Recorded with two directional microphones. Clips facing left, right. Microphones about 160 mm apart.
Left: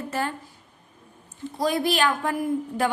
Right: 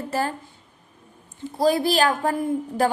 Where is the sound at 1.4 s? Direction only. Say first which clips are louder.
Right 4 dB; 30° right (ahead or behind).